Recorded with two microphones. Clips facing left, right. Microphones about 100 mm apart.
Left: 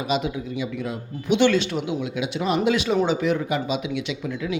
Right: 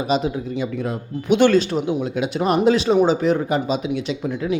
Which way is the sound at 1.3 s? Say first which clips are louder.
Right 4 dB; 45° right (ahead or behind).